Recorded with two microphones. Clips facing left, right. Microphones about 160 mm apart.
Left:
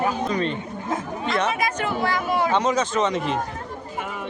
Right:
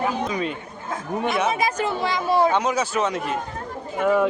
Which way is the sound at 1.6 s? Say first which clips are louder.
Right 2 dB; 30° right (ahead or behind).